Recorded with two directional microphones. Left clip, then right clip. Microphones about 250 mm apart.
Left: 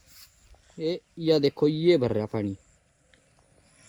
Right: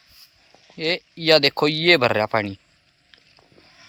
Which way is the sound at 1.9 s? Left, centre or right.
Right.